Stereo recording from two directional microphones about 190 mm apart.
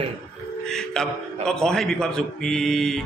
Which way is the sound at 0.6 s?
5° left (ahead or behind).